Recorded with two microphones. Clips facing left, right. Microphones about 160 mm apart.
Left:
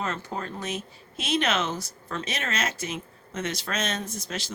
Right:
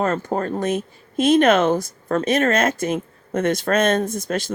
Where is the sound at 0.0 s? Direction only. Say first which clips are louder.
Right 10 dB; 50° right (ahead or behind).